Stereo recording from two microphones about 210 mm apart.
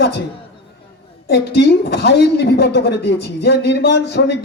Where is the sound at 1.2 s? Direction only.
50° left (ahead or behind).